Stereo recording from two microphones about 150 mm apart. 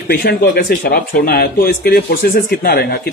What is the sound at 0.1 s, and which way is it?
Speech, 90° left.